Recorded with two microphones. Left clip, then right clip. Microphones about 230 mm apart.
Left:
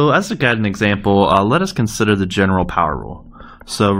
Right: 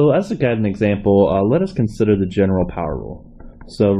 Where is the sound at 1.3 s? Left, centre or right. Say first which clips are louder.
Left 3 dB; centre.